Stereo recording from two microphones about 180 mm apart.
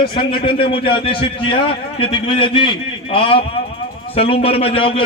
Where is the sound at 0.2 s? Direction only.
30° left (ahead or behind).